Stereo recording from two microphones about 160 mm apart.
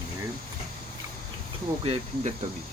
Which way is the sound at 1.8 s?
40° right (ahead or behind).